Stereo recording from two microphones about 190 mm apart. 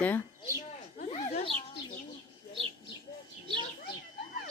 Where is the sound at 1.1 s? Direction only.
30° left (ahead or behind).